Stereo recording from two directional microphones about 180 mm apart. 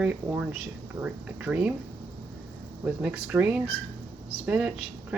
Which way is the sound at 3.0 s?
5° right (ahead or behind).